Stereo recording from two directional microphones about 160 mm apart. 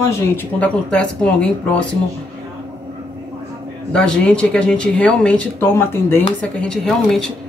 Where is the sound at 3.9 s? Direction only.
5° left (ahead or behind).